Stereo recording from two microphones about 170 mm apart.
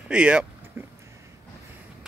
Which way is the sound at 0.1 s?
5° right (ahead or behind).